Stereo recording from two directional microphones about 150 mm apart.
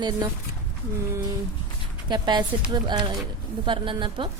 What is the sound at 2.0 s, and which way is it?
A woman's voice, 30° right (ahead or behind).